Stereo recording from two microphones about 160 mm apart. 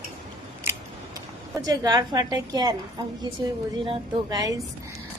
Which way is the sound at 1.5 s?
25° right (ahead or behind).